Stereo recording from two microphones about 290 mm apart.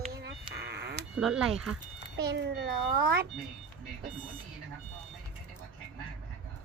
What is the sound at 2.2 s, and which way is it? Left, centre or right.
A child's voice, right.